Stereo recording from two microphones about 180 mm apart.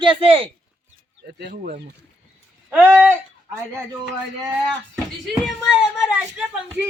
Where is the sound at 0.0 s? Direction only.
30° right (ahead or behind).